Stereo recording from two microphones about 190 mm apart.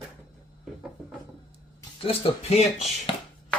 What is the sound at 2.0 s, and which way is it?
Speech, 30° left (ahead or behind).